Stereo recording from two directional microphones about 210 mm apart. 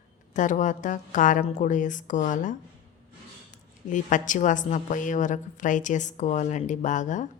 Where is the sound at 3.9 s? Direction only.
35° left (ahead or behind).